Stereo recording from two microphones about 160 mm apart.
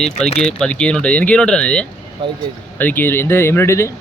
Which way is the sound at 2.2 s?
35° right (ahead or behind).